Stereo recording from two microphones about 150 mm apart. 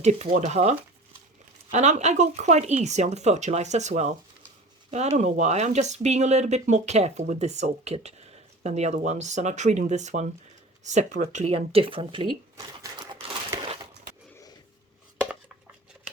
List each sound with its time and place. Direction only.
0.0 s speech: 50° right (ahead or behind)
15.2 s dishes: 10° right (ahead or behind)